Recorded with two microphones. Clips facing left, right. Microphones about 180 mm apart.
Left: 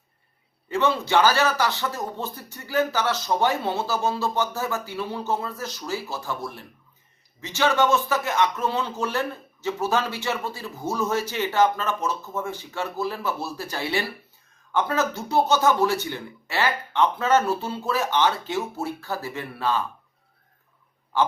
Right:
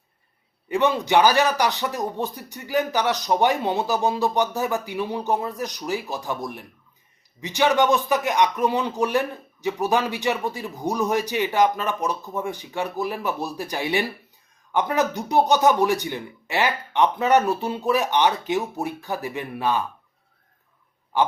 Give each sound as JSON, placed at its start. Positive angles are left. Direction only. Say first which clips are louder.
{"t": 0.7, "sound": "speech", "louder": "right 2 dB", "side_deg": -15}
{"t": 21.1, "sound": "speech", "louder": "right 1 dB", "side_deg": -15}